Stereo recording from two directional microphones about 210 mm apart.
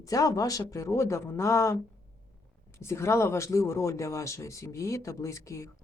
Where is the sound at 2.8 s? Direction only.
10° left (ahead or behind).